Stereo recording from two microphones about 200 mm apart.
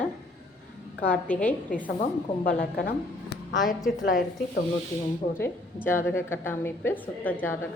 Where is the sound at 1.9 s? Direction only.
45° left (ahead or behind).